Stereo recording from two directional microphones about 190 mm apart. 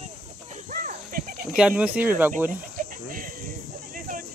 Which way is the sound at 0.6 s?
45° right (ahead or behind).